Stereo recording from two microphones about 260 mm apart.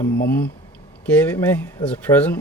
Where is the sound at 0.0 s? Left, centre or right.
Left.